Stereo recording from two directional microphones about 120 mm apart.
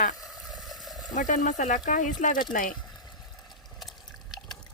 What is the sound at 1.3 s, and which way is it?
Speech, 90° left.